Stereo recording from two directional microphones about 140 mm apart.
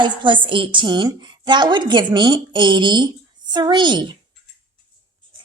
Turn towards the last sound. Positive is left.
turn(degrees=-35)  # may be behind; listen again after turning